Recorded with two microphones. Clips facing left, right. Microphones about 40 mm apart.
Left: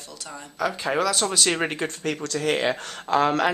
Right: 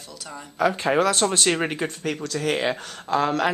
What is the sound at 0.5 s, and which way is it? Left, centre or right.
Speech, right.